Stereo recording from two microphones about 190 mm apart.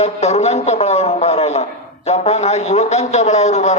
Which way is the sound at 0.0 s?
35° left (ahead or behind).